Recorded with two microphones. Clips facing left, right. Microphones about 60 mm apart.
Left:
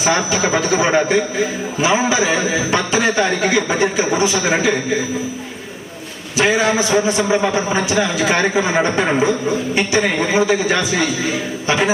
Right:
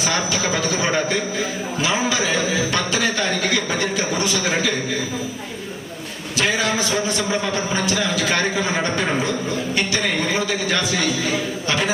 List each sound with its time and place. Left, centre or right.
0.0 s a man's voice: centre
6.3 s a man's voice: left